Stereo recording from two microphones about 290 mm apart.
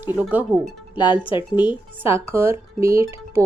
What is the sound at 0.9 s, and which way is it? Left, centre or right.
Speech, centre.